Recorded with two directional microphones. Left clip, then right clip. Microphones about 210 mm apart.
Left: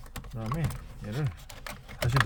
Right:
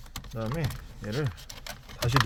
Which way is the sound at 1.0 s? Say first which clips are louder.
Right 5 dB; 45° right (ahead or behind).